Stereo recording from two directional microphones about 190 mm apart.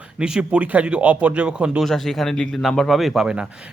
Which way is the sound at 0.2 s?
5° right (ahead or behind).